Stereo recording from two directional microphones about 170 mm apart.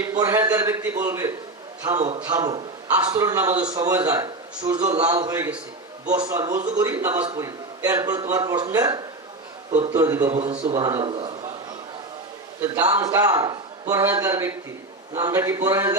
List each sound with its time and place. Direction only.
0.2 s a man's voice: 15° right (ahead or behind)
10.3 s a man's voice: 35° right (ahead or behind)
12.6 s a man's voice: 20° right (ahead or behind)